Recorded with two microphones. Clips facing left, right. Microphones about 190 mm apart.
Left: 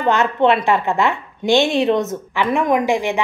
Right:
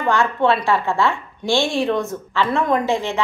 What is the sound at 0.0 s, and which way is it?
A woman's voice, 20° left (ahead or behind).